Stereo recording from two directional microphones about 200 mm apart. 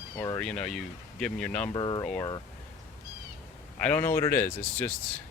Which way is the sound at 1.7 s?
20° left (ahead or behind).